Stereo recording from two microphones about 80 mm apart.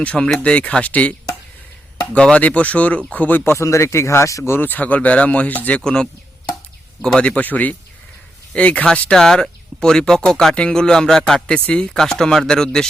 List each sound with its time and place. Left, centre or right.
0.0 s speech: centre
2.1 s speech: centre; by 4.5 s left
4.5 s speech: left
7.2 s speech: centre